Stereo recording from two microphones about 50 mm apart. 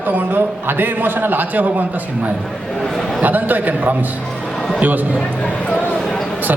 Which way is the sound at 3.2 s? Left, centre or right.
Right.